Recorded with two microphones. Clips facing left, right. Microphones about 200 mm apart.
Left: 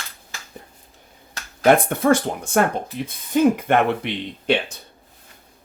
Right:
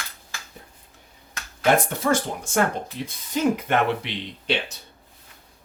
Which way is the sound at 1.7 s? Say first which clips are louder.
Left 4 dB; 55° left (ahead or behind).